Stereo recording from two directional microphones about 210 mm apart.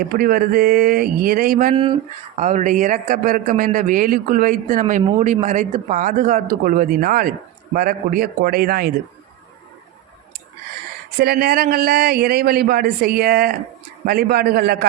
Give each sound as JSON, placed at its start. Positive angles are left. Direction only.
{"t": 0.1, "sound": "speech", "side_deg": -45}
{"t": 1.7, "sound": "speech", "side_deg": -25}
{"t": 11.2, "sound": "speech", "side_deg": -45}